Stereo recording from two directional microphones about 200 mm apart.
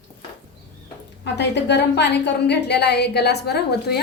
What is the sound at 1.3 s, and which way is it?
A woman's voice, 60° left (ahead or behind).